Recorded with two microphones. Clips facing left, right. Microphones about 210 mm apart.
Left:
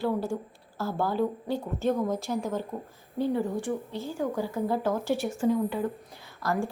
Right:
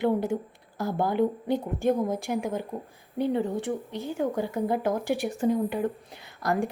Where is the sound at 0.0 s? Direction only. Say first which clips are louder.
Right 3 dB; 20° right (ahead or behind).